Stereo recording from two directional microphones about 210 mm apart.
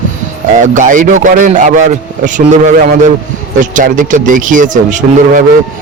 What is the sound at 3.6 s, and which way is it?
Speech, 40° right (ahead or behind).